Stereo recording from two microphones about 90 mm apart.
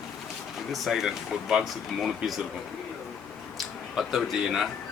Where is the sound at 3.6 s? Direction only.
Centre (ahead or behind).